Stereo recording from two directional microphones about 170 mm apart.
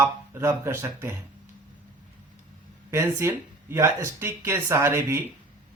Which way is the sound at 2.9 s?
15° right (ahead or behind).